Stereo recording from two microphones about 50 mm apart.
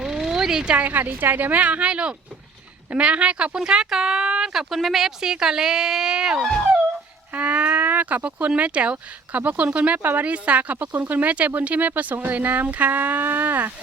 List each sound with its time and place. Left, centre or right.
0.0 s a sound: centre
0.7 s speech: right
1.5 s speech: right
6.4 s dog: centre
7.3 s speech: right